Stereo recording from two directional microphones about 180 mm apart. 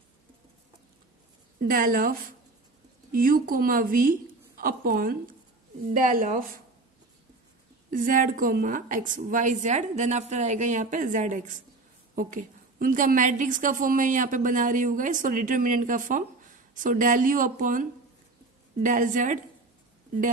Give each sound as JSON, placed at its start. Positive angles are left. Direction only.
{"t": 1.7, "sound": "a woman's voice", "side_deg": -50}
{"t": 7.9, "sound": "a woman's voice", "side_deg": -45}